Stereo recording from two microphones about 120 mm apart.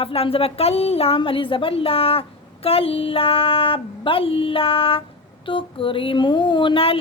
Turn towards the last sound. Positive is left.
turn(degrees=50)  # may be behind; listen again after turning